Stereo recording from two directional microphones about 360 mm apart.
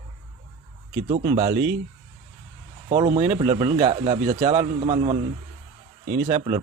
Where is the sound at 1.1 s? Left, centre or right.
Centre.